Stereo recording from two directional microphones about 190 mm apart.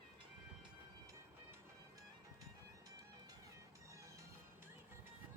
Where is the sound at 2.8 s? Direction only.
20° right (ahead or behind).